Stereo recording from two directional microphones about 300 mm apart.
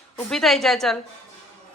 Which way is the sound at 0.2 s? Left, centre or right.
Centre.